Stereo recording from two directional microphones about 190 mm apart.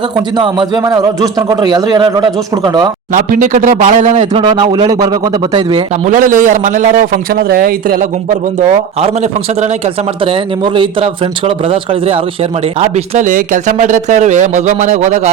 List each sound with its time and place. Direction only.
0.2 s a man's voice: 25° right (ahead or behind)
3.1 s a man's voice: 45° right (ahead or behind)
4.4 s a man's voice: 25° right (ahead or behind)
6.1 s a man's voice: 45° right (ahead or behind)
9.0 s a man's voice: 35° right (ahead or behind)